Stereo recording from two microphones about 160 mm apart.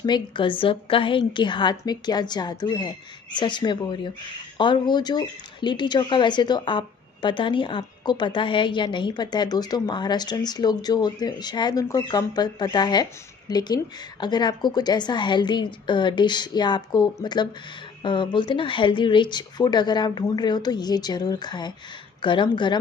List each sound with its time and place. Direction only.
0.0 s speech: 30° left (ahead or behind)